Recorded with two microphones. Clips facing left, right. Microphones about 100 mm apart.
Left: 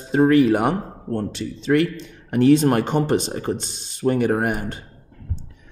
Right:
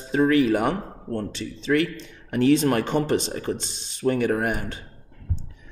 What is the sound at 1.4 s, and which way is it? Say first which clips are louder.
Speech: left 3 dB; 45° left (ahead or behind).